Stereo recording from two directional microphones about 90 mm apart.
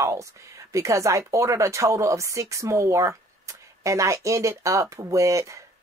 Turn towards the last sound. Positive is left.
turn(degrees=-35)  # may be behind; listen again after turning